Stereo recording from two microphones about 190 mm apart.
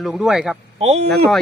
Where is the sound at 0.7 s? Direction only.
35° right (ahead or behind).